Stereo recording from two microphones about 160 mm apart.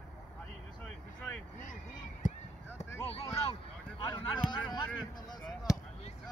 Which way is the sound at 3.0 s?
35° left (ahead or behind).